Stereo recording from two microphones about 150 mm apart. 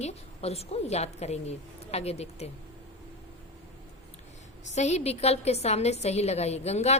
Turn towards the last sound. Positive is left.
turn(degrees=45)  # may be behind; listen again after turning